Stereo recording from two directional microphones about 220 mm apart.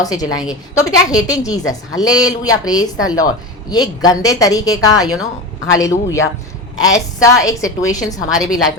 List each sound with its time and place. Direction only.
0.0 s a woman's voice: 15° left (ahead or behind)